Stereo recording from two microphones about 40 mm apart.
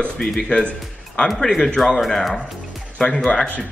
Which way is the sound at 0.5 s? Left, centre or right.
Left.